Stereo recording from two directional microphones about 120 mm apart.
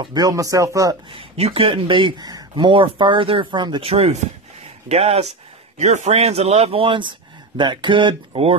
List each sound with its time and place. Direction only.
0.0 s speech: 35° right (ahead or behind)
1.1 s speech: 55° right (ahead or behind)
3.9 s speech: 60° right (ahead or behind)
5.8 s speech: 75° right (ahead or behind); by 8.5 s 55° right (ahead or behind)